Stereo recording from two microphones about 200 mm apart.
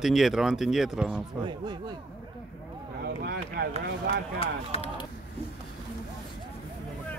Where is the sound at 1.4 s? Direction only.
20° right (ahead or behind).